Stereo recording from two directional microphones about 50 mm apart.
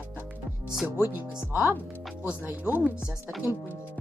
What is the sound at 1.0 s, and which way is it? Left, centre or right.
Speech, right.